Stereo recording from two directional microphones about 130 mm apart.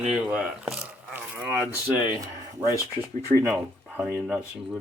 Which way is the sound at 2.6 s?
20° right (ahead or behind).